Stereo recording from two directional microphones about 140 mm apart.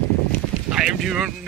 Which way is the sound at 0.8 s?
Centre (ahead or behind).